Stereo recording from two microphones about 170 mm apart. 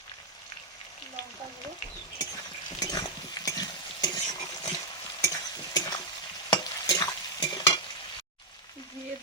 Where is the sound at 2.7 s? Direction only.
20° left (ahead or behind).